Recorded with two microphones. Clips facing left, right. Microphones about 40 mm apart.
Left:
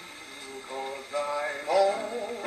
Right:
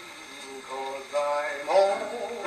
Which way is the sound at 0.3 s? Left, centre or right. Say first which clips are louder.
Right 1 dB; centre.